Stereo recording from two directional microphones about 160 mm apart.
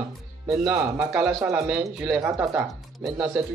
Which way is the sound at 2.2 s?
15° right (ahead or behind).